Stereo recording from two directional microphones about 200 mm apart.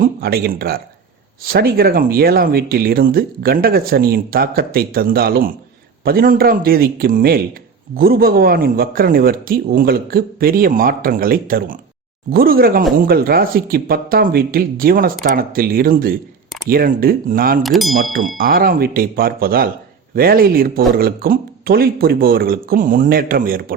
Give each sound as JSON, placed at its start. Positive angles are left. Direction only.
{"t": 0.0, "sound": "speech", "side_deg": -50}
{"t": 17.6, "sound": "speech", "side_deg": 0}
{"t": 18.3, "sound": "speech", "side_deg": -45}